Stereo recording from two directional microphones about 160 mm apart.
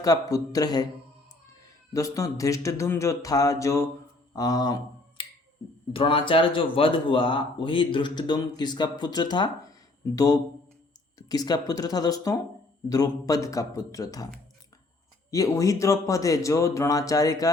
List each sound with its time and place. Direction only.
0.0 s speech: 20° left (ahead or behind)
1.9 s speech: 20° left (ahead or behind)
15.3 s speech: 20° left (ahead or behind)